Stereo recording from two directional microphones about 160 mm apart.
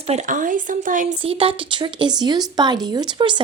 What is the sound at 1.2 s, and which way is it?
Speech, 35° right (ahead or behind).